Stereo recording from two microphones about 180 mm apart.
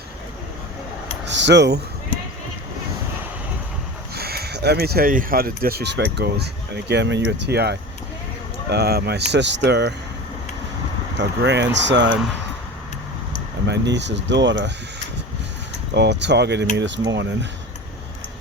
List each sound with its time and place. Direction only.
1.3 s speech: 75° right (ahead or behind)
4.1 s speech: 60° right (ahead or behind)
11.2 s speech: 75° right (ahead or behind)
13.7 s speech: 75° right (ahead or behind)
16.0 s speech: 75° right (ahead or behind)
16.7 s speech: 85° right